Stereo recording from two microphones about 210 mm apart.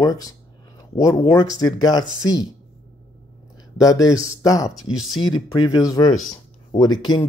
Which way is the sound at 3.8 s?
15° left (ahead or behind).